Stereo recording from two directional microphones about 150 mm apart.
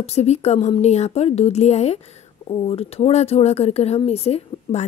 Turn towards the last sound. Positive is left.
turn(degrees=45)  # may be behind; listen again after turning